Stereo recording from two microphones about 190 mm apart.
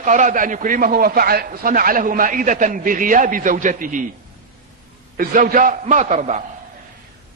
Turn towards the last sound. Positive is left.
turn(degrees=-40)  # may be behind; listen again after turning